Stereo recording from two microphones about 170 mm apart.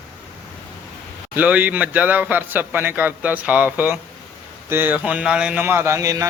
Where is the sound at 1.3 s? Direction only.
10° right (ahead or behind).